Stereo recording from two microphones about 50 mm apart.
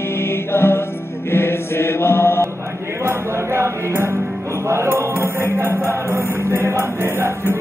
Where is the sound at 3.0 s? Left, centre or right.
Right.